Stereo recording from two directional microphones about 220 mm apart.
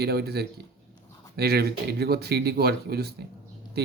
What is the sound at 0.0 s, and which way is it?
Speech, 45° right (ahead or behind).